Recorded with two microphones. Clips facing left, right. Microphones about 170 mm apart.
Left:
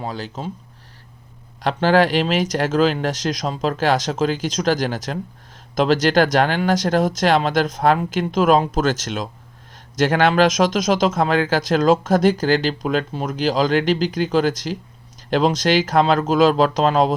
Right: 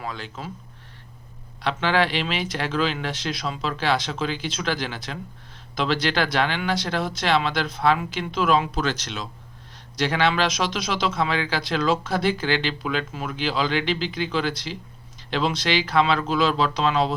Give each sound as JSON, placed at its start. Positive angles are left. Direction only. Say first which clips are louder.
{"t": 0.0, "sound": "speech", "louder": "left 5 dB", "side_deg": 35}
{"t": 1.6, "sound": "speech", "louder": "left 6 dB", "side_deg": 45}